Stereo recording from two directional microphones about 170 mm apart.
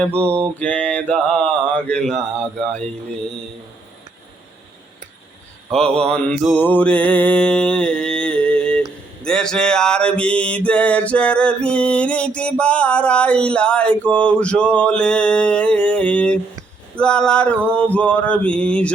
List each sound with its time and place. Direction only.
0.3 s mantra: 15° right (ahead or behind)
0.6 s mantra: 5° left (ahead or behind)
5.7 s mantra: 5° left (ahead or behind)